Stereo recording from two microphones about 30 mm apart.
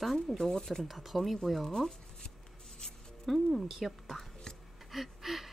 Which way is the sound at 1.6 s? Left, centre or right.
Centre.